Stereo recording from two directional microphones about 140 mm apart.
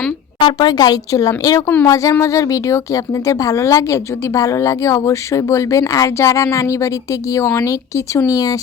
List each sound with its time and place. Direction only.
0.3 s a woman's voice: 35° left (ahead or behind)
1.6 s speech: 15° left (ahead or behind)
1.9 s a woman's voice: 25° left (ahead or behind)